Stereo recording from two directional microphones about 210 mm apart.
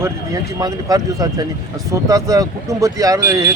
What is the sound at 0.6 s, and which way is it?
Speech, 15° right (ahead or behind).